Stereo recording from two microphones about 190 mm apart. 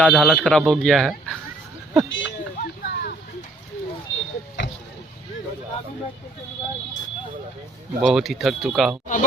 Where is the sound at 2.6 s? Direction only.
55° left (ahead or behind).